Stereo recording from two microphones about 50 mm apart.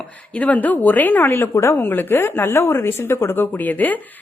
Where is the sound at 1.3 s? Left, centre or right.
Left.